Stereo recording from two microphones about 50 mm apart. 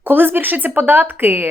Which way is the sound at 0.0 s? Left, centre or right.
Right.